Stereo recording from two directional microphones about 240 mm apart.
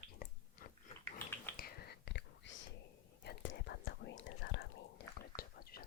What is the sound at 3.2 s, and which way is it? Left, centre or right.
Whispering, left.